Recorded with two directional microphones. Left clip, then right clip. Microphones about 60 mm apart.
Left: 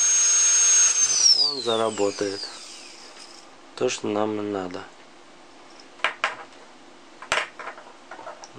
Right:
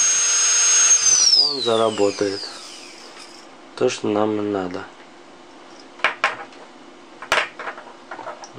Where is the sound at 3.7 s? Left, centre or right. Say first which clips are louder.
Right 5 dB; left.